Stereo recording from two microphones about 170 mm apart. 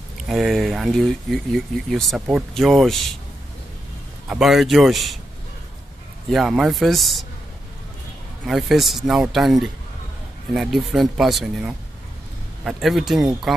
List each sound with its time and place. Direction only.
0.3 s speech: centre (ahead or behind)
4.3 s speech: centre (ahead or behind)
6.3 s speech: centre (ahead or behind)
8.5 s speech: centre (ahead or behind)